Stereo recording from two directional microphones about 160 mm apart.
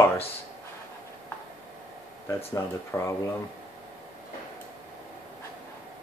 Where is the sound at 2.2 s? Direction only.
20° left (ahead or behind).